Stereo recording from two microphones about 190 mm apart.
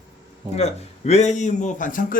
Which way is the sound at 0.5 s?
35° left (ahead or behind).